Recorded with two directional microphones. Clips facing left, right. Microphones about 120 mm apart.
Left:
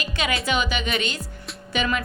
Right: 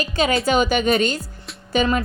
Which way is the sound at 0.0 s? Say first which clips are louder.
Right 7 dB; 35° right (ahead or behind).